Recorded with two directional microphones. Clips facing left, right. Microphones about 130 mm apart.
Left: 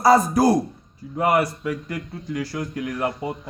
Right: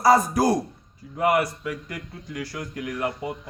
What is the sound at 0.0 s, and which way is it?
A man's voice, 30° left (ahead or behind).